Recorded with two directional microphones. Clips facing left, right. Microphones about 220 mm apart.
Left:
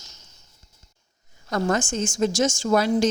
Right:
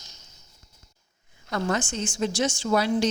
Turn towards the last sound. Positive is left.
turn(degrees=45)  # may be behind; listen again after turning